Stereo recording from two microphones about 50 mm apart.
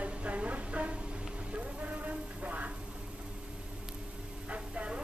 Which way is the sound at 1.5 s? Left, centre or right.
Right.